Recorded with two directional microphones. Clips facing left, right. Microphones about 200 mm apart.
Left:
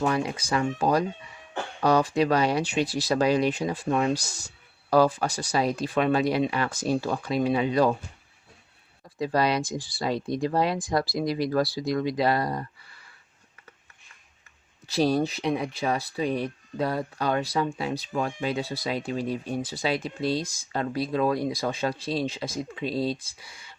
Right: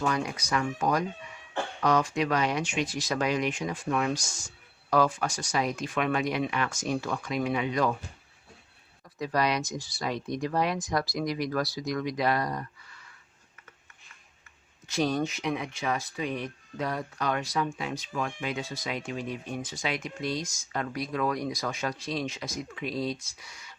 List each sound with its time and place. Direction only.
0.0 s speech: 30° left (ahead or behind)
9.1 s speech: 30° left (ahead or behind)
14.8 s speech: 35° left (ahead or behind)